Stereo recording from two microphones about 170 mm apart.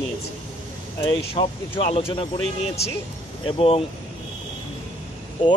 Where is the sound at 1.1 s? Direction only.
30° left (ahead or behind).